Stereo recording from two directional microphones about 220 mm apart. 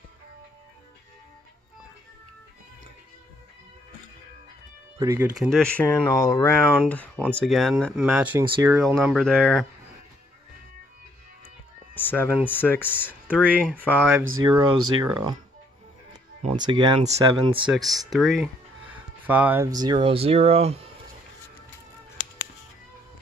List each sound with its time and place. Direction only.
4.9 s speech: 15° right (ahead or behind)
5.4 s speech: 5° left (ahead or behind)
11.9 s cat: 10° left (ahead or behind)
12.4 s speech: 10° left (ahead or behind)
13.3 s speech: 5° right (ahead or behind)
14.4 s speech: 15° right (ahead or behind)
16.4 s speech: 25° right (ahead or behind)
17.6 s speech: centre (ahead or behind); by 20.9 s 25° right (ahead or behind)